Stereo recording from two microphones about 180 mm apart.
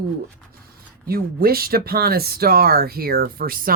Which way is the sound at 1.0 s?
55° right (ahead or behind).